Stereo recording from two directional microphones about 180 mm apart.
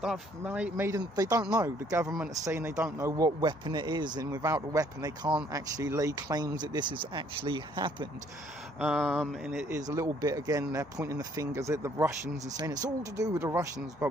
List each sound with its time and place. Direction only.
0.0 s speech: 5° right (ahead or behind); by 8.0 s 25° right (ahead or behind)
8.8 s mantra: centre (ahead or behind)
9.6 s speech: 15° right (ahead or behind)